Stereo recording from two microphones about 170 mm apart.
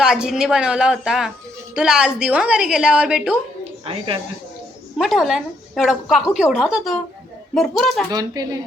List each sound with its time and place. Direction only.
0.0 s a woman's voice: 5° right (ahead or behind)
3.6 s a sound: 30° right (ahead or behind)
4.9 s a woman's voice: centre (ahead or behind)
8.1 s speech: 25° right (ahead or behind)